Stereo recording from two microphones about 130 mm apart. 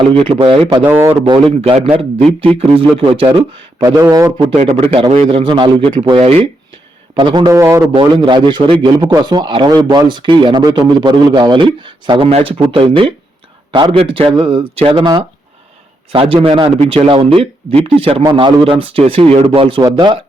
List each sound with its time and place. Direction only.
0.1 s a man's voice: 45° right (ahead or behind)
0.8 s speech: 15° right (ahead or behind)
1.3 s a man's voice: 45° right (ahead or behind)
3.8 s a man's voice: 25° right (ahead or behind)
4.5 s a man's voice: 50° right (ahead or behind)
6.1 s a man's voice: 55° right (ahead or behind)
7.2 s a man's voice: 35° right (ahead or behind)
7.9 s a man's voice: 40° right (ahead or behind)